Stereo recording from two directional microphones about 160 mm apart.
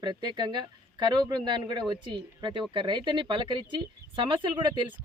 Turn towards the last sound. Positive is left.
turn(degrees=-30)  # may be behind; listen again after turning